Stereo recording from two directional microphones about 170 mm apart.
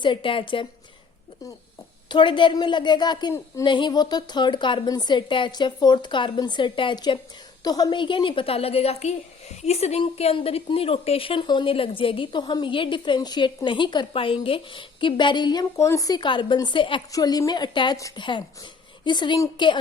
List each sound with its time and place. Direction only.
0.0 s a woman's voice: 30° left (ahead or behind)
2.0 s a woman's voice: 30° left (ahead or behind)